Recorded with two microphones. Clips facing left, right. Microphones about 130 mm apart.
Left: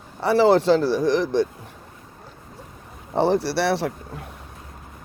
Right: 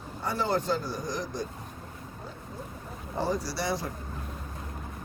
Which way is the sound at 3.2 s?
70° left (ahead or behind).